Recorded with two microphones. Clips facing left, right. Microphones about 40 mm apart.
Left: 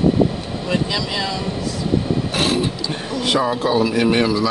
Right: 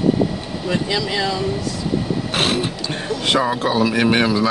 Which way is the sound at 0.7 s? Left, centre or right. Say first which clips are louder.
Right 1 dB; centre.